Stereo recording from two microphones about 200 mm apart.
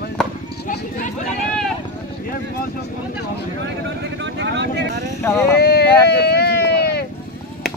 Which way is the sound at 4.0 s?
60° right (ahead or behind).